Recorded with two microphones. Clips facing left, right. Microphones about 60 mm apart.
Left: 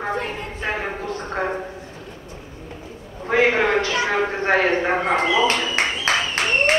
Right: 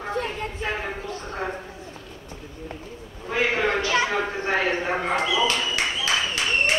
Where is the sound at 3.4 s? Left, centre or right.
Left.